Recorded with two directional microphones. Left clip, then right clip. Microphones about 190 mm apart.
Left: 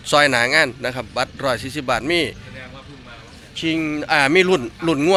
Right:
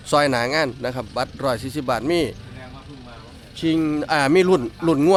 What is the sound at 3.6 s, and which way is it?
Speech, 25° right (ahead or behind).